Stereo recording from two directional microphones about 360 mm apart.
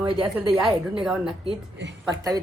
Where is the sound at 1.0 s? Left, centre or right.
Centre.